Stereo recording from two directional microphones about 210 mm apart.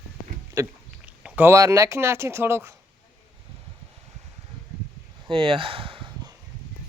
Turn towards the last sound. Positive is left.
turn(degrees=-20)  # may be behind; listen again after turning